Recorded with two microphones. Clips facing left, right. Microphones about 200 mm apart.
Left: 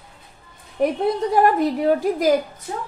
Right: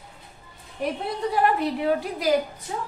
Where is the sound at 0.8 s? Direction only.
50° left (ahead or behind).